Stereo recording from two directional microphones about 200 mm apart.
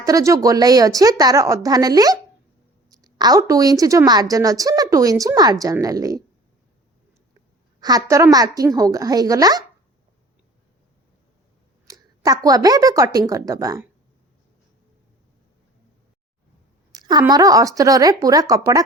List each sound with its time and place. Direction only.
0.0 s a woman's voice: 15° right (ahead or behind)
7.8 s a woman's voice: 20° right (ahead or behind)
11.9 s speech: 15° right (ahead or behind)
16.9 s a woman's voice: 20° right (ahead or behind)